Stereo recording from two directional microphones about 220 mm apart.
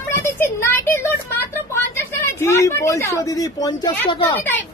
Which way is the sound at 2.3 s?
10° left (ahead or behind).